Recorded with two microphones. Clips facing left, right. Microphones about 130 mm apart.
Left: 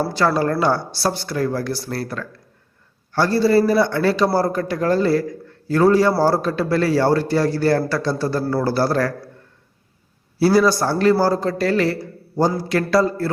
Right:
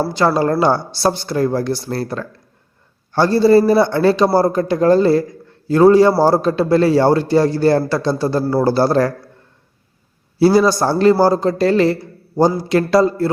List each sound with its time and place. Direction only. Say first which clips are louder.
0.0 s a man's voice: right 3 dB; 20° right (ahead or behind)
10.3 s a man's voice: right 3 dB; 20° right (ahead or behind)